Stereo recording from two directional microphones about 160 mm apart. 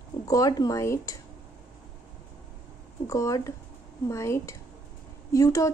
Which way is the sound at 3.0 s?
20° left (ahead or behind).